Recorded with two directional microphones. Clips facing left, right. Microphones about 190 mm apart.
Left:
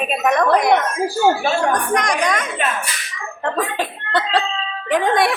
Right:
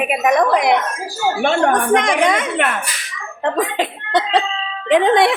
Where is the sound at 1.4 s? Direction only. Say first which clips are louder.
Right 3 dB; 70° right (ahead or behind).